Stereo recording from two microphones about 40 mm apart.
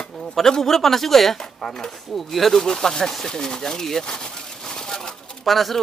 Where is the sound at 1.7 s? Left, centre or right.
Centre.